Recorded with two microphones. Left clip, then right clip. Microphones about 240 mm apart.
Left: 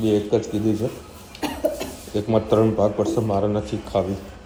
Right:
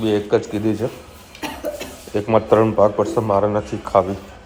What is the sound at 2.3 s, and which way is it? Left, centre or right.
Speech, right.